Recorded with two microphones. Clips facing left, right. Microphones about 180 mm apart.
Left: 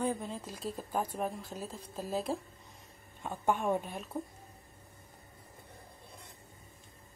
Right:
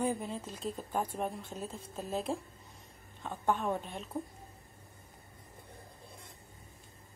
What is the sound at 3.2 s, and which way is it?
A woman's voice, 10° left (ahead or behind).